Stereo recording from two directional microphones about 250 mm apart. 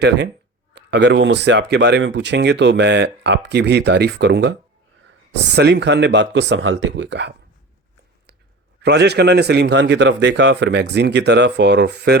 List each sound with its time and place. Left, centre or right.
0.9 s speech: right
5.5 s speech: right
8.8 s speech: right